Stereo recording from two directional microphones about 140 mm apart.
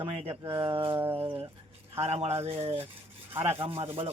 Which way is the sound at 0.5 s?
35° right (ahead or behind).